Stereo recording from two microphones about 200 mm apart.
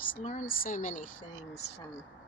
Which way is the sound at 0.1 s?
40° left (ahead or behind).